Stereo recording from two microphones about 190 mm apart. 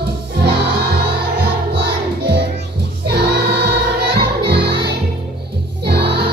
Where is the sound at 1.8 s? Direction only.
60° right (ahead or behind).